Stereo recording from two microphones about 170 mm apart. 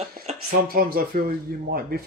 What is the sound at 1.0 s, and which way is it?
Speech, 60° right (ahead or behind).